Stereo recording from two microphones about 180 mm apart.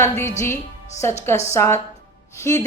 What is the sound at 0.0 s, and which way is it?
A woman's voice, 15° left (ahead or behind).